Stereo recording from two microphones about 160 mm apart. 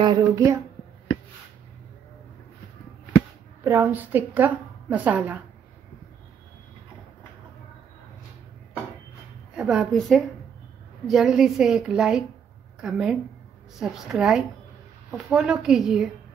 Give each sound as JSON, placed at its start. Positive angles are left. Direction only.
{"t": 0.0, "sound": "speech", "side_deg": -25}
{"t": 3.6, "sound": "a woman's voice", "side_deg": -15}
{"t": 9.6, "sound": "a woman's voice", "side_deg": -5}